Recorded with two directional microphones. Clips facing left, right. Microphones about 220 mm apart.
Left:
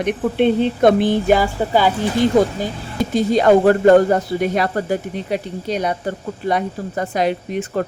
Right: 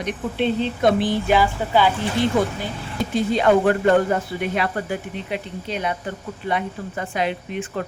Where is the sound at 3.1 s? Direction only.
40° left (ahead or behind).